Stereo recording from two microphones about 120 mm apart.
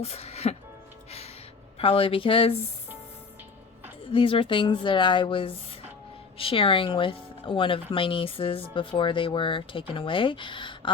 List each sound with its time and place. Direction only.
0.0 s music: 60° left (ahead or behind)
1.8 s speech: 50° left (ahead or behind)
4.0 s speech: 50° left (ahead or behind)